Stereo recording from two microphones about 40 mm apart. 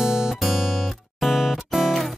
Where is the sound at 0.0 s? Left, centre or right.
Centre.